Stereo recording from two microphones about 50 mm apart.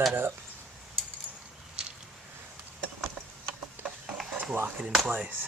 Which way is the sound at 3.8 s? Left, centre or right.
Right.